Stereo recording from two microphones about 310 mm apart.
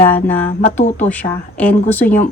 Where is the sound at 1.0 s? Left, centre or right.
Centre.